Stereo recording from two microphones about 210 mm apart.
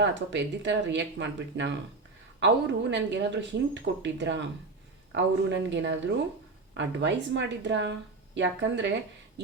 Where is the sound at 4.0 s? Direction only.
60° right (ahead or behind).